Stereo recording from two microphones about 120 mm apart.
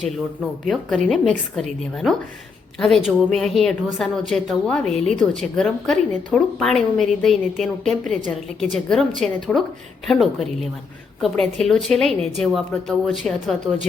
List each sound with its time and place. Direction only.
0.7 s a woman's voice: centre (ahead or behind)